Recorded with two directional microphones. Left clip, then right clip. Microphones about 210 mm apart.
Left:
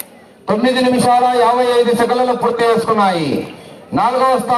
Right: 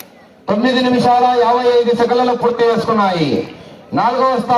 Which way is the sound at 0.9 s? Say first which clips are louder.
Right 1 dB; 30° left (ahead or behind).